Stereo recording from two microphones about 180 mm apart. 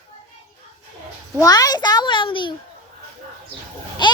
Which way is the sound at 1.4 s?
20° left (ahead or behind).